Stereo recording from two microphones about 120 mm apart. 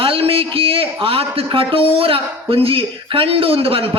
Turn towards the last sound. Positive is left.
turn(degrees=-50)  # may be behind; listen again after turning